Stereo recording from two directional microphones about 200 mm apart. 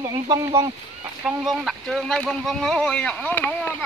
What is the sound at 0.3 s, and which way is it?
Duck, 15° right (ahead or behind).